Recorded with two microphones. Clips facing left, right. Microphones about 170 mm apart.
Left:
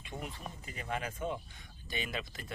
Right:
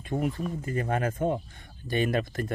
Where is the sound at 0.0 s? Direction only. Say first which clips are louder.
Right 14 dB; 50° right (ahead or behind).